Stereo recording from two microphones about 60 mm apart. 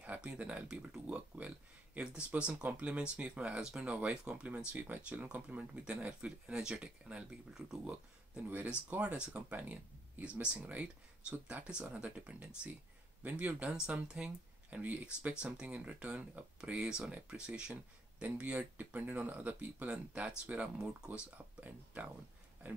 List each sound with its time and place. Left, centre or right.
0.0 s speech: right
8.9 s speech: centre
9.3 s speech: right; by 21.2 s centre
21.5 s speech: right